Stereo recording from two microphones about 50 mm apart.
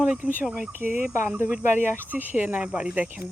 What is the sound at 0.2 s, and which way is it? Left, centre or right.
Speech, right.